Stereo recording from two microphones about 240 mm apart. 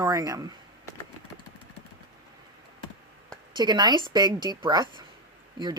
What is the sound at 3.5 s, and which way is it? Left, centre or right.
Speech, centre.